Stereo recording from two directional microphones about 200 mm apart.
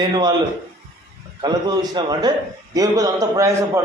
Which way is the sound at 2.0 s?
20° right (ahead or behind).